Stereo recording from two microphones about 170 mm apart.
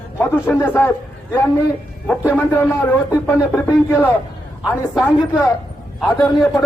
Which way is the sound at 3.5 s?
15° left (ahead or behind).